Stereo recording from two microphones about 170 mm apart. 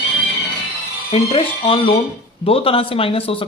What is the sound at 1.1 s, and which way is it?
Speech, 35° left (ahead or behind).